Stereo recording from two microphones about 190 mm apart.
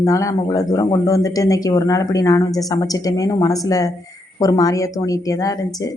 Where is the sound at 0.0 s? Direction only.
15° left (ahead or behind).